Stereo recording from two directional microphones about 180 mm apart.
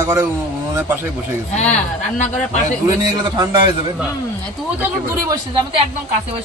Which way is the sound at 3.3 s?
25° right (ahead or behind).